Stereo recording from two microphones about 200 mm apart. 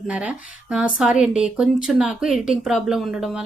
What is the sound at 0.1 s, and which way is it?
A woman's voice, 5° right (ahead or behind).